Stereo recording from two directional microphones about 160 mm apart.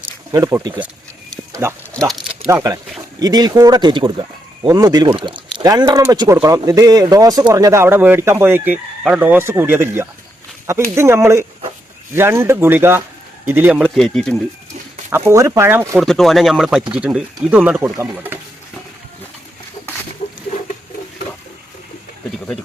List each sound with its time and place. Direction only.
0.3 s speech: 20° right (ahead or behind)
2.5 s speech: 20° right (ahead or behind)
14.0 s speech: 5° left (ahead or behind)
15.3 s speech: 20° right (ahead or behind)
16.0 s speech: centre (ahead or behind)
20.2 s a sound: 50° left (ahead or behind)